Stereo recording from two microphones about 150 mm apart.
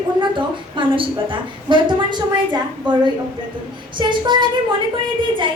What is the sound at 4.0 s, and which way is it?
Speech, 30° right (ahead or behind).